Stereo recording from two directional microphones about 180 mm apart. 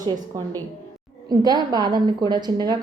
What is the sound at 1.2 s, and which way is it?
A woman's voice, 20° right (ahead or behind).